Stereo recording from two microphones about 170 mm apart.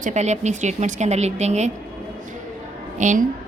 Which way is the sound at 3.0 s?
50° right (ahead or behind).